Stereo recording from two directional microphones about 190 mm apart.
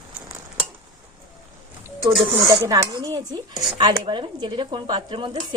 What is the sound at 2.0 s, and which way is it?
Speech, 20° right (ahead or behind).